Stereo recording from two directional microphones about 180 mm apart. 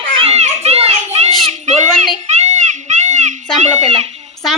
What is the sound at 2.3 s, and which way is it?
Children playing, 40° right (ahead or behind).